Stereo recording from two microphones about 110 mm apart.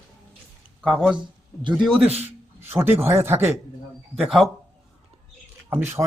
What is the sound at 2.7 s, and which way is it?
Speech, 20° right (ahead or behind).